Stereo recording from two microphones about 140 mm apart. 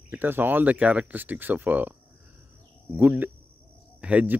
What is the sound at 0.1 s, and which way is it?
Speech, 15° right (ahead or behind).